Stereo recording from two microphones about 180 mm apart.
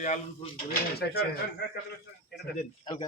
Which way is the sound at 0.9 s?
60° left (ahead or behind).